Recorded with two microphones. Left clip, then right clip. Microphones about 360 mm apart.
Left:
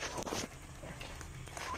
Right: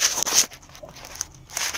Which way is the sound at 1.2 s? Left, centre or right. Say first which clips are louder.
Right 18 dB; right.